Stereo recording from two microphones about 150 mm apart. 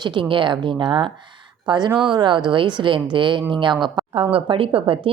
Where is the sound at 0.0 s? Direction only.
30° right (ahead or behind).